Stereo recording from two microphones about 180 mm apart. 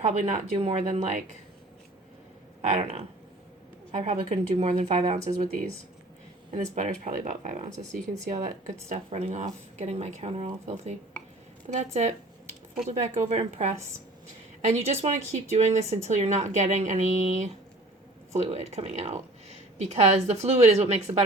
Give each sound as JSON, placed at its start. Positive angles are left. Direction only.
{"t": 0.0, "sound": "speech", "side_deg": -40}
{"t": 2.6, "sound": "speech", "side_deg": -35}
{"t": 6.5, "sound": "speech", "side_deg": -40}
{"t": 13.2, "sound": "speech", "side_deg": -40}